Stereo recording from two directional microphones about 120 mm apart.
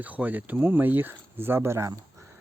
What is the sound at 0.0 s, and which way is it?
Speech, 15° right (ahead or behind).